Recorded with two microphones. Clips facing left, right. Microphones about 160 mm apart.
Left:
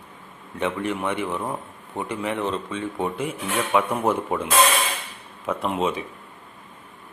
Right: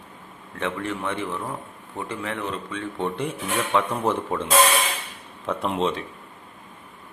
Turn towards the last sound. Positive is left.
turn(degrees=5)  # may be behind; listen again after turning